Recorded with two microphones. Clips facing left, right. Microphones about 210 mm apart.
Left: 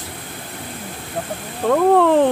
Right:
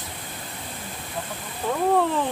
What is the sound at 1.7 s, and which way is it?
Speech, 65° left (ahead or behind).